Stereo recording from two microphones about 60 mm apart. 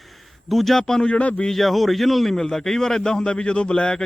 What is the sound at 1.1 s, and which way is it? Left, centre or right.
Speech, left.